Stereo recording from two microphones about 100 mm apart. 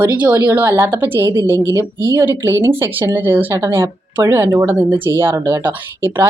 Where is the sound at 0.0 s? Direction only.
15° right (ahead or behind).